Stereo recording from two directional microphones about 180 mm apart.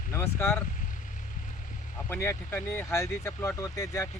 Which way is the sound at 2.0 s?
15° left (ahead or behind).